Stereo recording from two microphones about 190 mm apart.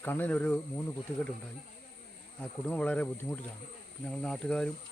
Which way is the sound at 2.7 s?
5° left (ahead or behind).